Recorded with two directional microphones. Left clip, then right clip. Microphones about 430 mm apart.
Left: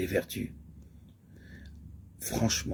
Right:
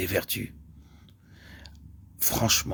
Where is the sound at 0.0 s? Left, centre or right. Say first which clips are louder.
Right 3 dB; right.